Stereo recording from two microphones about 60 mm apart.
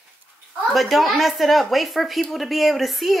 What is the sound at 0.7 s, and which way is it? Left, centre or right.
Speech, centre.